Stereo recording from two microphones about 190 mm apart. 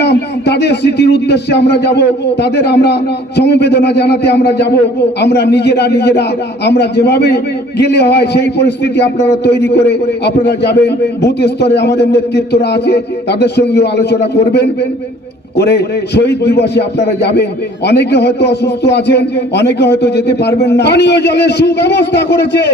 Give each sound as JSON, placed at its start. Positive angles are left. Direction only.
{"t": 0.0, "sound": "a man's voice", "side_deg": 60}